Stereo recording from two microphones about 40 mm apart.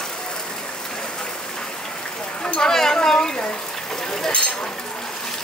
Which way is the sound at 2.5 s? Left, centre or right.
Centre.